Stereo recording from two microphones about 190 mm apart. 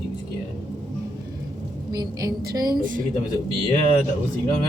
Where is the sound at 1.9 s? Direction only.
20° right (ahead or behind).